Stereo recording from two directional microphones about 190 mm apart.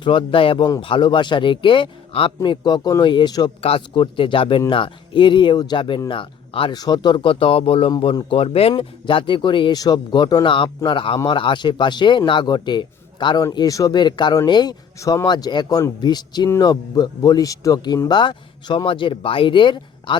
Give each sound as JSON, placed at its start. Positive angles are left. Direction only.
{"t": 0.0, "sound": "speech", "side_deg": 25}